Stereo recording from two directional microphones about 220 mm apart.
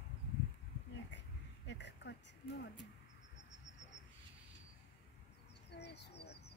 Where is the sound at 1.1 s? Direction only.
55° left (ahead or behind).